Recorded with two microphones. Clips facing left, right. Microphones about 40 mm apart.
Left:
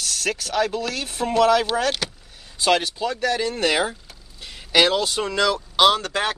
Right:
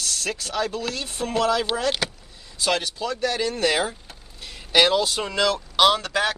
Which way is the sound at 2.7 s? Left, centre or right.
Left.